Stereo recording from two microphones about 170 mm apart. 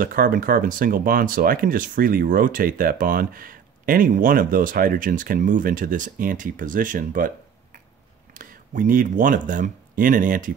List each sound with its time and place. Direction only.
0.0 s speech: 60° right (ahead or behind)